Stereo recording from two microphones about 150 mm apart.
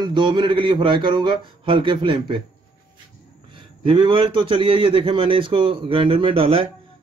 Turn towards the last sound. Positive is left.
turn(degrees=-40)  # may be behind; listen again after turning